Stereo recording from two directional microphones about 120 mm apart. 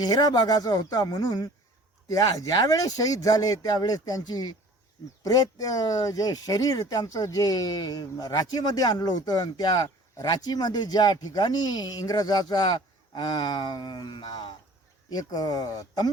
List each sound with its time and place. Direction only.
0.0 s speech: 35° left (ahead or behind)